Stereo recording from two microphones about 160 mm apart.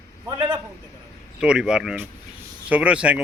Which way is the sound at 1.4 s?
5° right (ahead or behind).